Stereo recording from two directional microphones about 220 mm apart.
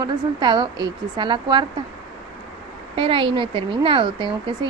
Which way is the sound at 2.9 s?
25° right (ahead or behind).